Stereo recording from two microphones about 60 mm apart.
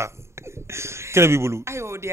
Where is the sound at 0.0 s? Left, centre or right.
Right.